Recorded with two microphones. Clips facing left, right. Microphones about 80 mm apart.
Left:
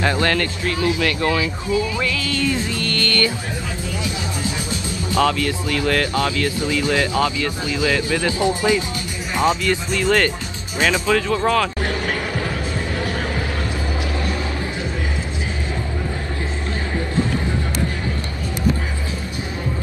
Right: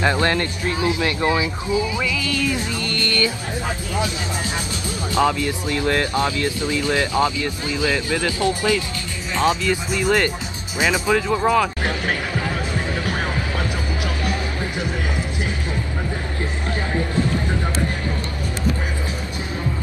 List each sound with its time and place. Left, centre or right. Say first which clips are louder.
0.0 s speech: even; right
5.1 s speech: left 1 dB; right
8.2 s speech: left 2 dB; left
9.5 s speech: left 1 dB; centre